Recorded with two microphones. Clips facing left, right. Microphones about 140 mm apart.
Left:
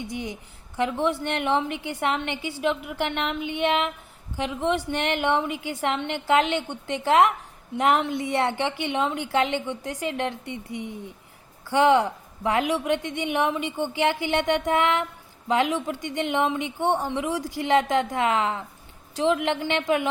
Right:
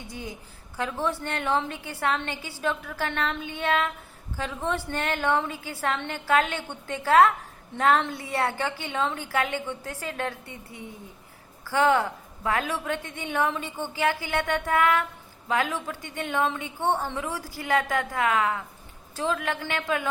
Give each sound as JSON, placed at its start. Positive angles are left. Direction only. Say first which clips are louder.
{"t": 0.1, "sound": "a woman's voice", "louder": "left 5 dB", "side_deg": 20}